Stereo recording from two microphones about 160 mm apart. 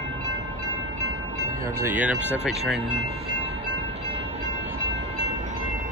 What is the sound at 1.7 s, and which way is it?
Speech, 10° right (ahead or behind).